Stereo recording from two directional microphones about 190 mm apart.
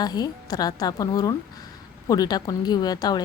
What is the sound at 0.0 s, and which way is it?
A woman's voice, 20° left (ahead or behind).